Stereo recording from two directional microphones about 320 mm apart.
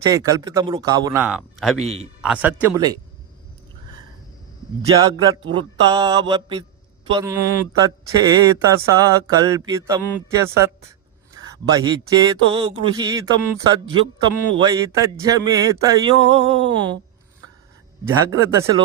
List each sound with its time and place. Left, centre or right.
0.0 s speech: centre
5.5 s speech: centre
11.8 s speech: centre
16.7 s speech: right
18.3 s speech: centre